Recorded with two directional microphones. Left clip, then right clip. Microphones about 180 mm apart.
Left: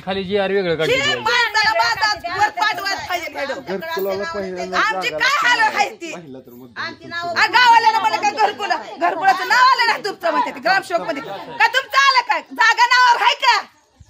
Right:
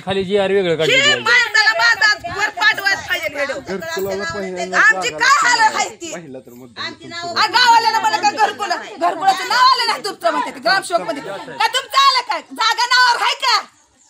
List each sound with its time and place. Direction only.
0.0 s speech: 50° right (ahead or behind)
0.8 s a child's voice: 55° left (ahead or behind)
1.5 s a sound: 55° left (ahead or behind)
2.3 s chatter: 60° left (ahead or behind)
3.9 s speech: 50° right (ahead or behind)
5.3 s a child's voice: 35° left (ahead or behind)
7.3 s a woman's voice: 10° left (ahead or behind)